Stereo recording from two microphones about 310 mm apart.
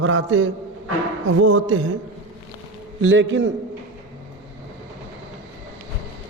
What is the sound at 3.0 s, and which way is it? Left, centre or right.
Speech, right.